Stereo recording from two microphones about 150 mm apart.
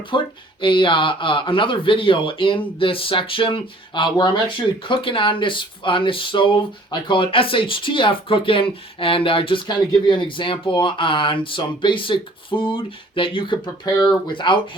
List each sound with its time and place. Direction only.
0.1 s speech: 30° left (ahead or behind)